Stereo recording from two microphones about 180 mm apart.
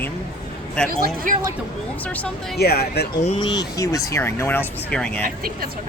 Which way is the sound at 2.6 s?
60° left (ahead or behind).